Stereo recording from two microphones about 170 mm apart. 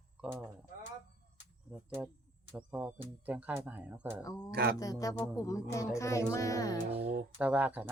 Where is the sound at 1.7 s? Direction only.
5° right (ahead or behind).